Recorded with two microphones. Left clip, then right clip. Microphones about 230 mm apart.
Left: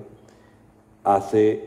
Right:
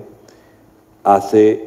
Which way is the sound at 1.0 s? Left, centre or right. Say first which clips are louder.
Right 7 dB; right.